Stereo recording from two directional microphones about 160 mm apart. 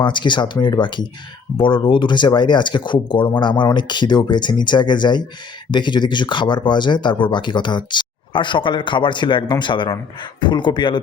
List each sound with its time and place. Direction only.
0.0 s speech: 30° left (ahead or behind)